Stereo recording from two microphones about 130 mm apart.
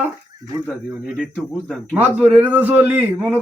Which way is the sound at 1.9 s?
15° right (ahead or behind).